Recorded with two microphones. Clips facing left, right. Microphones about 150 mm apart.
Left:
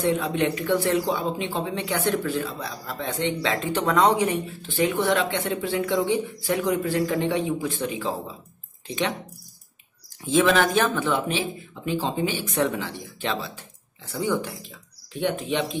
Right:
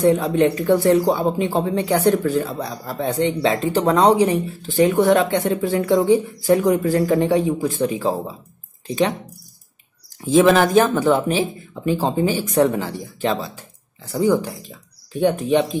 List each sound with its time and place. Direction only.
0.0 s speech: 40° right (ahead or behind)
10.2 s speech: 40° right (ahead or behind)